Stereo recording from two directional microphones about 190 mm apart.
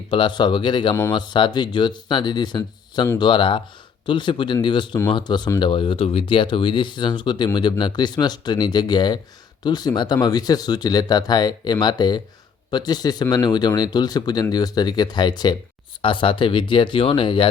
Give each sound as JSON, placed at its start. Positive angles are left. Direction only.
{"t": 0.1, "sound": "speech", "side_deg": 25}